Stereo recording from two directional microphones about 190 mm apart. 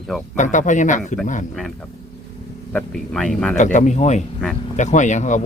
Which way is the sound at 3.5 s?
40° left (ahead or behind).